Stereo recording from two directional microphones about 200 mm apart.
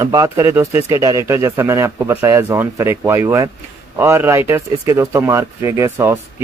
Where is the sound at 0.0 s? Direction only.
15° right (ahead or behind).